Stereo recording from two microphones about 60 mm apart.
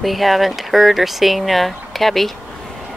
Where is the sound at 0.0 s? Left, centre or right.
Centre.